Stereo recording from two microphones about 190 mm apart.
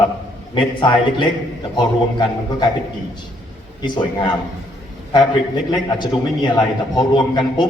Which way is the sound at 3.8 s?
25° left (ahead or behind).